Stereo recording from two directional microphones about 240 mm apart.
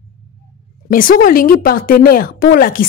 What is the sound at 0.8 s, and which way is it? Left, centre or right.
Speech, left.